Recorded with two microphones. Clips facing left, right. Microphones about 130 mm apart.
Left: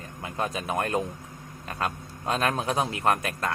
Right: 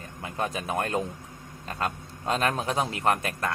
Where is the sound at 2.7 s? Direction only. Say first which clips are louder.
Left 1 dB; 25° left (ahead or behind).